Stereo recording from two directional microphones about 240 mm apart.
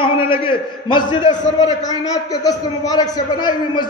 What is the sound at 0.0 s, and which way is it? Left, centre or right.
A man's voice, left.